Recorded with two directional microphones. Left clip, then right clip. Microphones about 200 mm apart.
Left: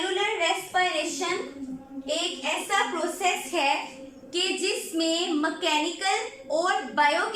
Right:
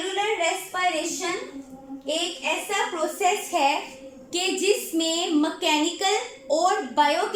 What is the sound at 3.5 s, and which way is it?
Speech, 20° right (ahead or behind).